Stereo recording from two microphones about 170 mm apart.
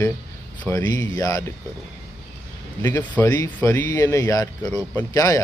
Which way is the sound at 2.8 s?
15° left (ahead or behind).